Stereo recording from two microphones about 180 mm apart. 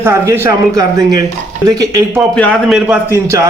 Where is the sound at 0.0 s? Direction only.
15° right (ahead or behind).